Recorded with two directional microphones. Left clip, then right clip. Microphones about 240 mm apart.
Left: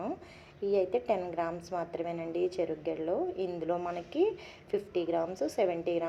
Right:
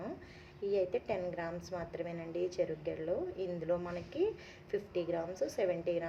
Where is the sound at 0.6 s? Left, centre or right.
Centre.